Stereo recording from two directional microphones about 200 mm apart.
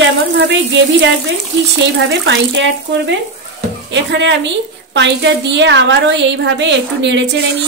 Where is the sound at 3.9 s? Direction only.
65° right (ahead or behind).